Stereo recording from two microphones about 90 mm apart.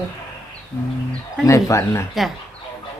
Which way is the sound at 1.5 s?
35° left (ahead or behind).